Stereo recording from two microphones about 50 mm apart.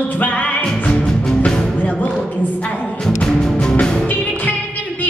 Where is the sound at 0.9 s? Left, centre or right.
Centre.